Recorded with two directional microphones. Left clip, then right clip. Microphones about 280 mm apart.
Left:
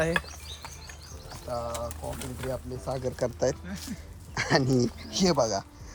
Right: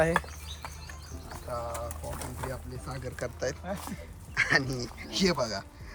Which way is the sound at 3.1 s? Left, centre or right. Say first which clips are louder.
Left 4 dB; left.